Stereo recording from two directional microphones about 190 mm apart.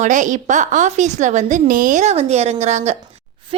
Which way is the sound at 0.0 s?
40° right (ahead or behind).